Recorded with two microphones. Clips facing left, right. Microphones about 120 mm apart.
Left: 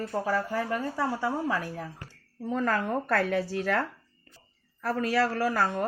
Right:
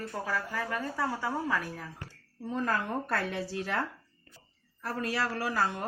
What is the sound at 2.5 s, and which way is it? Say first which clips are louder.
Speech: left 4 dB; 55° left (ahead or behind).